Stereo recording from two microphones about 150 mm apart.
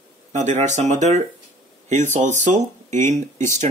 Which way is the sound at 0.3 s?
50° right (ahead or behind).